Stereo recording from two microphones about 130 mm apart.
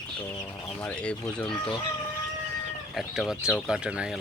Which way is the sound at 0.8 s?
10° left (ahead or behind).